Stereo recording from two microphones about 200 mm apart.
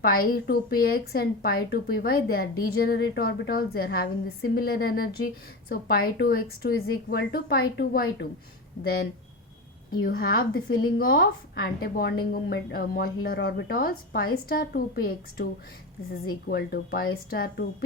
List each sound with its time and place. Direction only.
0.0 s a woman's voice: 50° left (ahead or behind)